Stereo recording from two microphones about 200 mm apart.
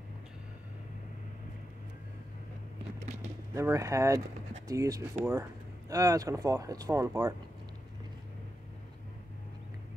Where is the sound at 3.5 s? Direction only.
15° right (ahead or behind).